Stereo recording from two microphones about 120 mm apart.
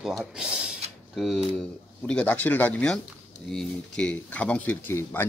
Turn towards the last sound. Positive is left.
turn(degrees=15)  # may be behind; listen again after turning